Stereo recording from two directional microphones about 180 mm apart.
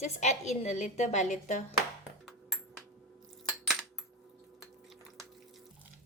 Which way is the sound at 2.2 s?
Centre (ahead or behind).